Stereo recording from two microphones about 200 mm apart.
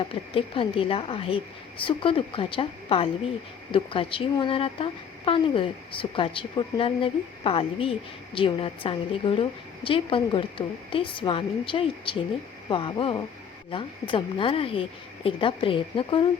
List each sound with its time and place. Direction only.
0.1 s speech: 25° left (ahead or behind)